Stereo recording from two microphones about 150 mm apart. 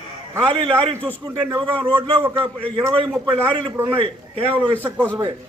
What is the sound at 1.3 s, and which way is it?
Speech, 20° right (ahead or behind).